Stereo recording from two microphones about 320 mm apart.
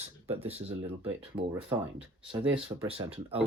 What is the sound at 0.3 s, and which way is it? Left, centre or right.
Speech, centre.